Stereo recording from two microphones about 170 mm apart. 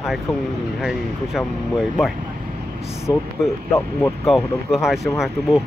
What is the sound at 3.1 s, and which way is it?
Speech, 25° left (ahead or behind).